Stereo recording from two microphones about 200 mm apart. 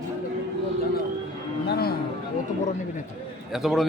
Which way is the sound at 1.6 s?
50° left (ahead or behind).